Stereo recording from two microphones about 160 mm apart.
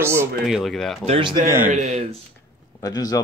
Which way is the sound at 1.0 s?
40° right (ahead or behind).